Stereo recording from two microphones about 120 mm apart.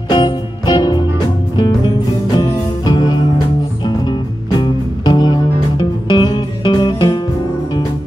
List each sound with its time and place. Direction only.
0.1 s music: 35° left (ahead or behind)